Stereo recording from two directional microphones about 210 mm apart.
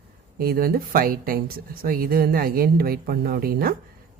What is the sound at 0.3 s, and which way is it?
Speech, 45° right (ahead or behind).